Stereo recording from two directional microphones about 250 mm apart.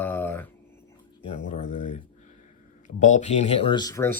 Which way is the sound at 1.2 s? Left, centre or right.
Left.